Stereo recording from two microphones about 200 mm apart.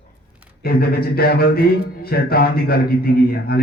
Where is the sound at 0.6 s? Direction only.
50° left (ahead or behind).